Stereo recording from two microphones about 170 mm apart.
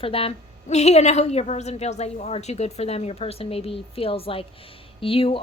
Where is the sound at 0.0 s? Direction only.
35° left (ahead or behind).